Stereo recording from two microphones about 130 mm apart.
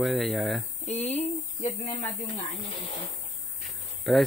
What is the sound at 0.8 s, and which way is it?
Speech, 60° left (ahead or behind).